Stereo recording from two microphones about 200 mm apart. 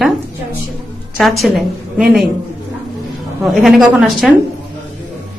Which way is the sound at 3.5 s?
Centre (ahead or behind).